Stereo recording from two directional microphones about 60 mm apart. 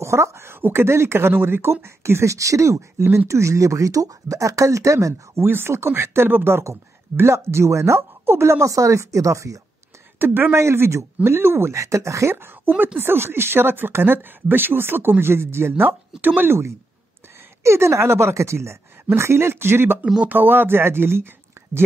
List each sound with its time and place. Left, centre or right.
0.0 s speech: right
7.2 s speech: right
10.1 s speech: right
10.6 s speech: right
12.4 s speech: right
15.8 s speech: right
17.6 s speech: right
20.2 s speech: right
21.6 s whispering: right